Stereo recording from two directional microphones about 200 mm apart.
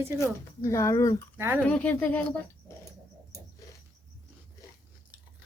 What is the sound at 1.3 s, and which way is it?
Speech, 10° right (ahead or behind).